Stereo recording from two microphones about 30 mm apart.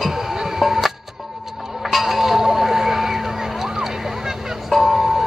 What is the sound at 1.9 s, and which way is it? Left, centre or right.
Chink, centre.